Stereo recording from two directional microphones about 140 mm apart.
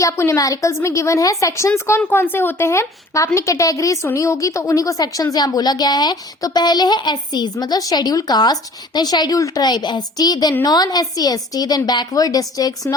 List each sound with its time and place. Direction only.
0.0 s a woman's voice: 20° left (ahead or behind)